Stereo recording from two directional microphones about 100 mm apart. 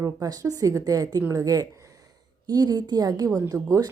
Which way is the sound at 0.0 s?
35° right (ahead or behind).